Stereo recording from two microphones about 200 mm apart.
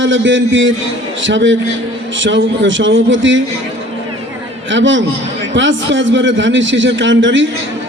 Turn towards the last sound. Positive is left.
turn(degrees=-70)  # may be behind; listen again after turning